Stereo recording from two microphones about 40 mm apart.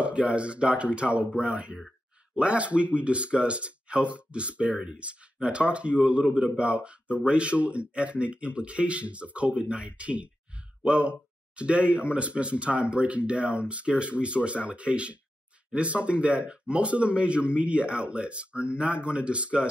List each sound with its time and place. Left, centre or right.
0.0 s speech: right